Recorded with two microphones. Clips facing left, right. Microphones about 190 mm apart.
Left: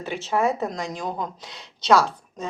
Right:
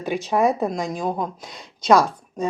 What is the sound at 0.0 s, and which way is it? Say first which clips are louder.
Speech: right 3 dB; 15° right (ahead or behind).